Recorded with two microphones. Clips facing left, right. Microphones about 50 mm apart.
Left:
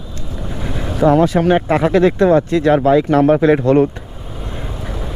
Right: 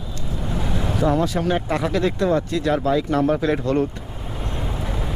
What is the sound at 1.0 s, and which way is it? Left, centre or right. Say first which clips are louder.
Speech: left 9 dB; left.